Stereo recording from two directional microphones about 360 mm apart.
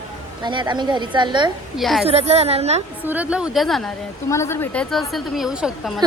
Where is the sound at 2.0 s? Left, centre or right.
Centre.